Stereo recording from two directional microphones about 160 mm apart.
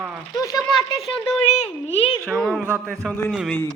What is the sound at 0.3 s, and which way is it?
Speech, 25° left (ahead or behind).